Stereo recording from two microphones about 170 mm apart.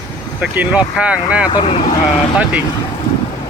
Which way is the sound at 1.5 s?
35° left (ahead or behind).